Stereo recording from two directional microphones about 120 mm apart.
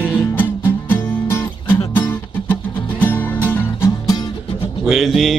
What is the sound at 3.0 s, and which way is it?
Music, 15° left (ahead or behind).